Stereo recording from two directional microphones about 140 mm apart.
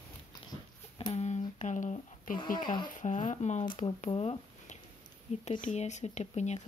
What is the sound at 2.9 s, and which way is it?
Speech, 60° left (ahead or behind).